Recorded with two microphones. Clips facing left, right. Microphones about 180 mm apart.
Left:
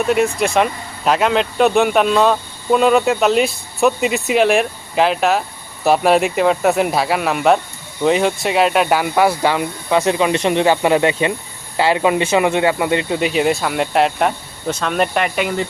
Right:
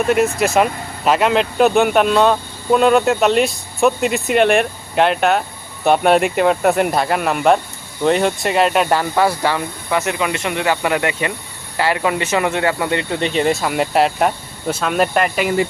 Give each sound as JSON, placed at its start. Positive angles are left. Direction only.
{"t": 0.1, "sound": "speech", "side_deg": 0}
{"t": 13.2, "sound": "speech", "side_deg": 5}